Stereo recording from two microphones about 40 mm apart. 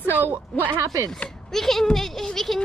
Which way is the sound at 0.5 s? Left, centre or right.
Left.